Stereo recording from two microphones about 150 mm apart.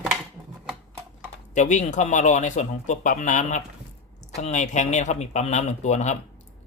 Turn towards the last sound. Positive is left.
turn(degrees=50)  # may be behind; listen again after turning